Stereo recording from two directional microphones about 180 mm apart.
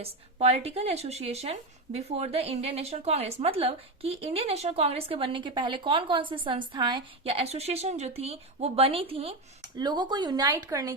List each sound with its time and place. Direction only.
0.0 s speech: 35° right (ahead or behind); by 10.9 s 20° right (ahead or behind)